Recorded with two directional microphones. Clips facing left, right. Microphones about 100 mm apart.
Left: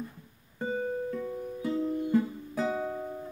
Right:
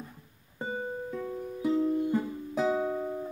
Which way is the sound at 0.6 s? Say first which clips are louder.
Left 3 dB; 15° right (ahead or behind).